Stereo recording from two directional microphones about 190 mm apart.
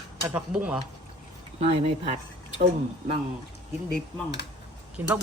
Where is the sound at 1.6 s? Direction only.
30° right (ahead or behind).